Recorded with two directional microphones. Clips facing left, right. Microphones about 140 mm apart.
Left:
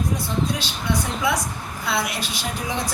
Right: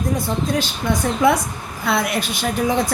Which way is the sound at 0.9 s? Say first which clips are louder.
Right 6 dB; 50° right (ahead or behind).